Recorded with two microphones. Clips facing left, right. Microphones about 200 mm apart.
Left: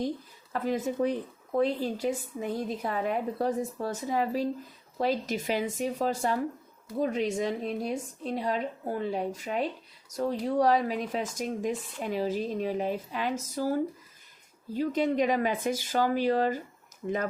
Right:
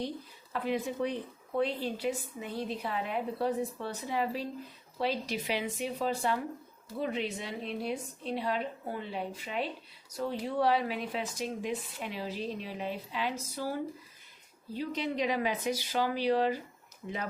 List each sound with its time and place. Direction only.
0.5 s speech: 45° left (ahead or behind)